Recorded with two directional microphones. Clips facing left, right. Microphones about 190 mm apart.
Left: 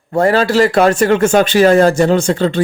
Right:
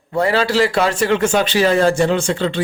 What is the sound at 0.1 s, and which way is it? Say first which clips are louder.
A man's voice: left 4 dB; 45° left (ahead or behind).